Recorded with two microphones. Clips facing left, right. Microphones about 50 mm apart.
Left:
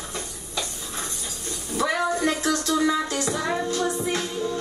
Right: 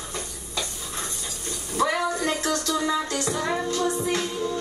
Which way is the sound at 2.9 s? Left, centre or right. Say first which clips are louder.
Left 1 dB; centre.